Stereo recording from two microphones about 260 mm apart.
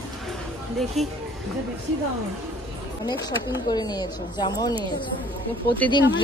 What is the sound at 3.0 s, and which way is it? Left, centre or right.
Speech, centre.